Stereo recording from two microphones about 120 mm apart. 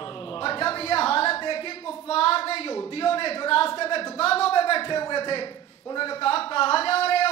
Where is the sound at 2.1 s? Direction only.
55° left (ahead or behind).